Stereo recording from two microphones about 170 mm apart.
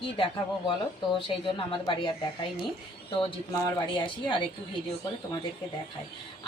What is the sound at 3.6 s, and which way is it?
Speech, 25° left (ahead or behind).